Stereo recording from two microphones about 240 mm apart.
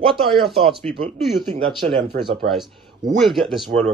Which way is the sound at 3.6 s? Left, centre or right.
Right.